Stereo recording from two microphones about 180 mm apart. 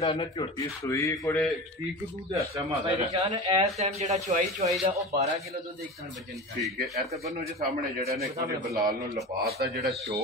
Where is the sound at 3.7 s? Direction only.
40° right (ahead or behind).